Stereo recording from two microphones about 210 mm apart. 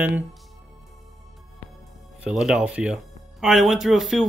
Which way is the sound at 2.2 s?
5° right (ahead or behind).